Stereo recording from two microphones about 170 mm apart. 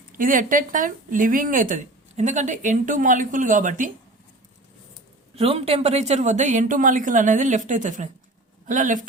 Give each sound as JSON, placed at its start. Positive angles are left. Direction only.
{"t": 0.2, "sound": "speech", "side_deg": -55}
{"t": 5.3, "sound": "speech", "side_deg": -35}